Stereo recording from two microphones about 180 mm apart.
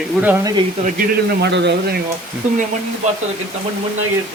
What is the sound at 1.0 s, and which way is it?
Speech, 70° right (ahead or behind).